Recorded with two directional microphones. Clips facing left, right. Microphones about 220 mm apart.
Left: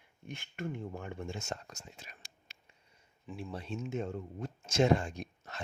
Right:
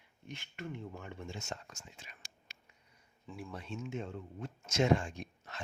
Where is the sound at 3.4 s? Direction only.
30° left (ahead or behind).